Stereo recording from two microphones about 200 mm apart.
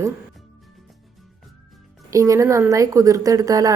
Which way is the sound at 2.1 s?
15° right (ahead or behind).